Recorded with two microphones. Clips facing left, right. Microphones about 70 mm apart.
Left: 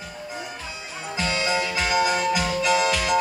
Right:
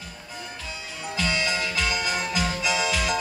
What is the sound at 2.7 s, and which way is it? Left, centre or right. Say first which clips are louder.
Music: left 6 dB; left.